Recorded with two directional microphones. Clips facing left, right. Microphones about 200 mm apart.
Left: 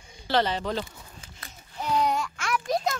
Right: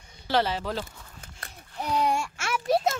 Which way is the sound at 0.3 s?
5° right (ahead or behind).